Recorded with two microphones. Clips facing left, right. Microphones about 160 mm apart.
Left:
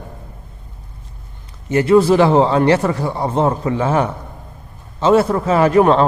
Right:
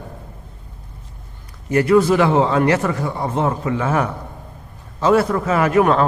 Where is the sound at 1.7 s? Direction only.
25° left (ahead or behind).